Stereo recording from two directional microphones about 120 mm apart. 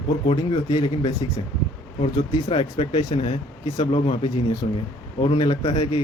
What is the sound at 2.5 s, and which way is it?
A man's voice, 50° left (ahead or behind).